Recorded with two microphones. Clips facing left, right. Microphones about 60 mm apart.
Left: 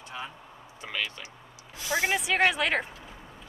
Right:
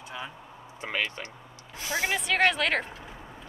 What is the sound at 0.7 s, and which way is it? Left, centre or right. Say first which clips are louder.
Speech: right 3 dB; right.